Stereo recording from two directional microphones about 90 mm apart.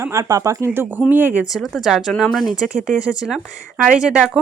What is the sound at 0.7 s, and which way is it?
Speech, 25° right (ahead or behind).